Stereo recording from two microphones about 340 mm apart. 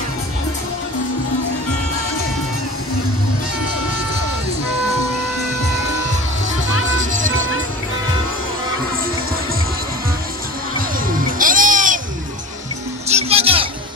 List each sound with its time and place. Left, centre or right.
11.3 s music: right
13.1 s music: centre